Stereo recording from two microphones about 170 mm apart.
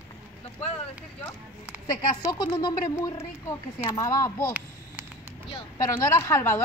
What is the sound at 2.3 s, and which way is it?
Speech, 30° left (ahead or behind).